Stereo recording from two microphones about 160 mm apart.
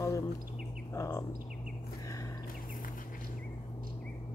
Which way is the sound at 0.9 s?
20° left (ahead or behind).